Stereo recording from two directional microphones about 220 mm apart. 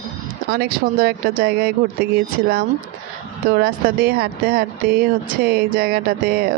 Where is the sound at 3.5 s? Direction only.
45° right (ahead or behind).